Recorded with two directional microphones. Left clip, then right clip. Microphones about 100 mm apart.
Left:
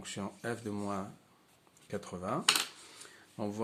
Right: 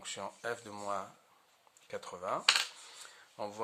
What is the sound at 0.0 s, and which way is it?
Speech, 45° right (ahead or behind).